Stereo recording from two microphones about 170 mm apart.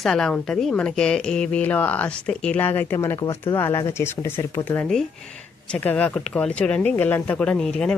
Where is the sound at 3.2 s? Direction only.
30° left (ahead or behind).